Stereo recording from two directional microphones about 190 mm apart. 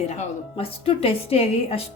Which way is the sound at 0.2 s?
30° left (ahead or behind).